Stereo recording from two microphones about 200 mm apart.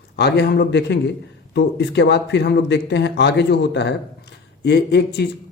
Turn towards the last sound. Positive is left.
turn(degrees=55)  # may be behind; listen again after turning